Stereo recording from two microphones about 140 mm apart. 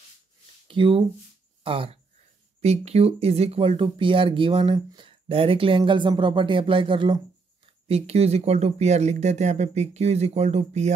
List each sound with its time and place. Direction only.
0.7 s speech: 40° right (ahead or behind)
7.9 s speech: 50° right (ahead or behind)